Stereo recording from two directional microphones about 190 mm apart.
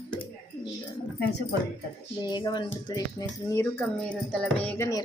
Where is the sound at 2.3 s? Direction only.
25° left (ahead or behind).